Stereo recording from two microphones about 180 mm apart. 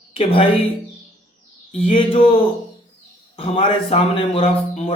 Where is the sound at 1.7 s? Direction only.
35° left (ahead or behind).